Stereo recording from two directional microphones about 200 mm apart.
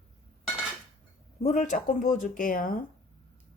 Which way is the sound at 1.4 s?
35° left (ahead or behind).